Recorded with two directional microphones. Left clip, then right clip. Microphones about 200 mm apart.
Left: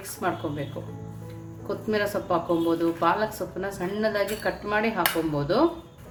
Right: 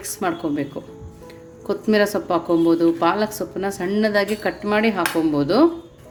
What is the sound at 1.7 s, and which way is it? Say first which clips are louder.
Speech: right 8 dB; 45° right (ahead or behind).